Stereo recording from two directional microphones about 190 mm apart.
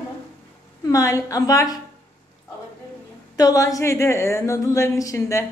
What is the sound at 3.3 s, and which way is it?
A woman's voice, 20° left (ahead or behind).